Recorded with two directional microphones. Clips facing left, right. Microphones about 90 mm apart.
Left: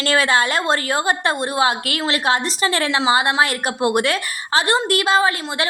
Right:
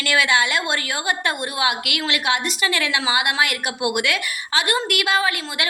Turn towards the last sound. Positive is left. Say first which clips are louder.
# left 4 dB
turn(degrees=30)  # may be behind; listen again after turning